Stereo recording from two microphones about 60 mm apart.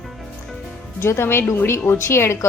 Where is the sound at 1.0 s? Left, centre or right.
Left.